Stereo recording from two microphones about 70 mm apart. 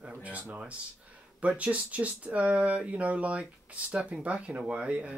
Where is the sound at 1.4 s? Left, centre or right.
Centre.